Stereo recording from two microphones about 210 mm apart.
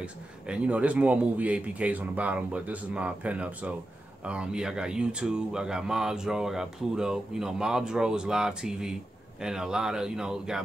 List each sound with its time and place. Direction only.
0.0 s a man's voice: 5° right (ahead or behind)